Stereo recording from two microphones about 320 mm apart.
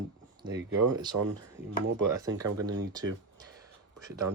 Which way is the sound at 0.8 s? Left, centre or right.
Right.